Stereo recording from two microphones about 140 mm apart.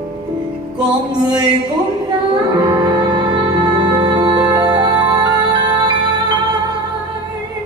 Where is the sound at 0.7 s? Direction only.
30° right (ahead or behind).